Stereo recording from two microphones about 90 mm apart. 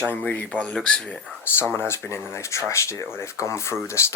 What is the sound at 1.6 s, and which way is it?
Speech, 25° left (ahead or behind).